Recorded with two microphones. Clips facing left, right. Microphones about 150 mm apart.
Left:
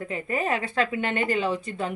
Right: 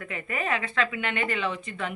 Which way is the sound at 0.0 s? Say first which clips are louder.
Left 4 dB; 30° left (ahead or behind).